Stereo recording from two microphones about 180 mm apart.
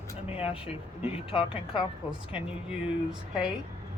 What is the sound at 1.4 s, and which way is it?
Speech, 30° left (ahead or behind).